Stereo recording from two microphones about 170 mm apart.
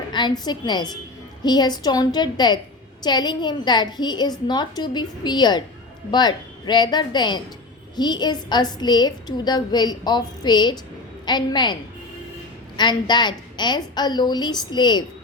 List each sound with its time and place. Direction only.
0.1 s a woman's voice: 25° left (ahead or behind)